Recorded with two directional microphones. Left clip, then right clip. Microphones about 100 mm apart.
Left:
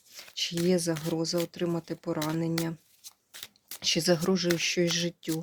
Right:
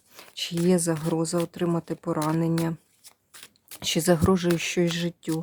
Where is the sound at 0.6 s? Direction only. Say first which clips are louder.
Right 4 dB; 40° right (ahead or behind).